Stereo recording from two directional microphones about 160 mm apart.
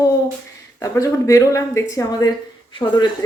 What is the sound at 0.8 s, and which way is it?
A woman's voice, 20° left (ahead or behind).